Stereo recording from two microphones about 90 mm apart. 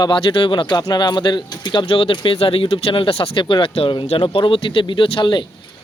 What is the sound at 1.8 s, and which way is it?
Speech, 80° left.